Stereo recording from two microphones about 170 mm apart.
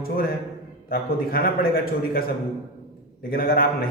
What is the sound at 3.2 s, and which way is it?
Speech, 65° left (ahead or behind).